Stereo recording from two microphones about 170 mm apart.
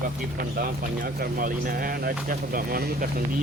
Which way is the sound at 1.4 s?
55° right (ahead or behind).